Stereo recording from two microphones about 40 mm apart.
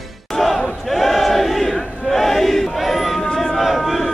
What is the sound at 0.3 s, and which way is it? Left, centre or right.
Battle cry, centre.